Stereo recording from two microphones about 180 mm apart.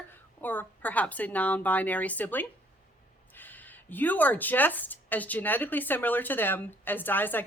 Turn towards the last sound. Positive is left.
turn(degrees=10)  # may be behind; listen again after turning